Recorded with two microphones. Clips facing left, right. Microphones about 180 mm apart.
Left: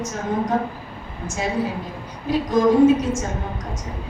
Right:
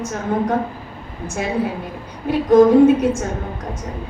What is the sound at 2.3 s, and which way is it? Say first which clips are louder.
Speech: right 2 dB; 60° right (ahead or behind).